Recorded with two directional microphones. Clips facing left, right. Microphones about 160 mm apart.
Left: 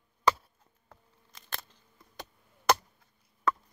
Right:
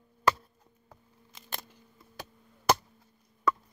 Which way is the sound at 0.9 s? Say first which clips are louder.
Right 1 dB; 5° right (ahead or behind).